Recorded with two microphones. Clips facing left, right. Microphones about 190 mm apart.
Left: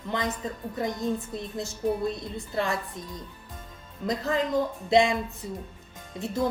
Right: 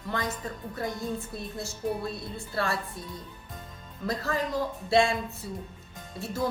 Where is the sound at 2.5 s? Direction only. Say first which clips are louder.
Left 2 dB; 20° left (ahead or behind).